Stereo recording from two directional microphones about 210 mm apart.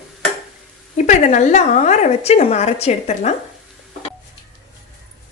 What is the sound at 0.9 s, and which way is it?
A woman's voice, 35° left (ahead or behind).